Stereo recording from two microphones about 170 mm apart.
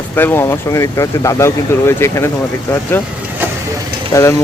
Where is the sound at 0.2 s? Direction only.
15° left (ahead or behind).